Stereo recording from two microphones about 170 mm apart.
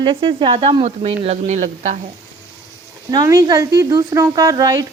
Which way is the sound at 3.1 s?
20° right (ahead or behind).